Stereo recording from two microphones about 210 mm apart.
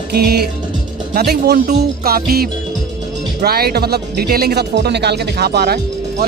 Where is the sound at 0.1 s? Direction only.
50° right (ahead or behind).